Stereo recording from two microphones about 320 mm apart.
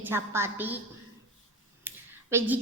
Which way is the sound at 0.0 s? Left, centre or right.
Centre.